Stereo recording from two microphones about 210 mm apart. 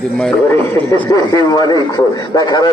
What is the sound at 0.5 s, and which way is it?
A man's voice, 10° left (ahead or behind).